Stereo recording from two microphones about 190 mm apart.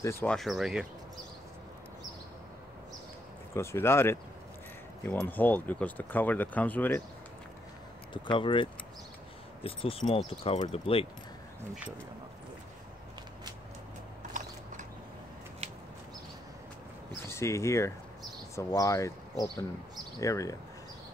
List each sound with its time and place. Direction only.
0.0 s speech: 10° left (ahead or behind)
3.5 s speech: 15° left (ahead or behind)
8.1 s speech: 25° left (ahead or behind)
17.3 s speech: 15° left (ahead or behind)